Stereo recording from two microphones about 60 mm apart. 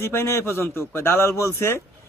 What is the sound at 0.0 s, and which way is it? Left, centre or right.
A man's voice, left.